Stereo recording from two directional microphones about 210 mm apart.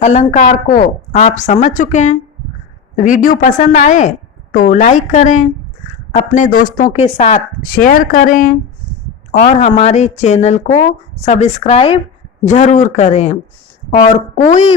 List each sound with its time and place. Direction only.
0.0 s speech: 35° left (ahead or behind)